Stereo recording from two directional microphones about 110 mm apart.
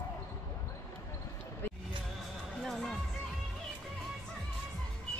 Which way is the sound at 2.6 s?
5° left (ahead or behind).